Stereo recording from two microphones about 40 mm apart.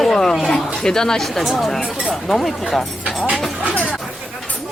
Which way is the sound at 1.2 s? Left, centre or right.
Centre.